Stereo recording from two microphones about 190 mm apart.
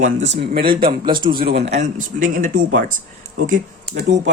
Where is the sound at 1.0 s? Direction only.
25° right (ahead or behind).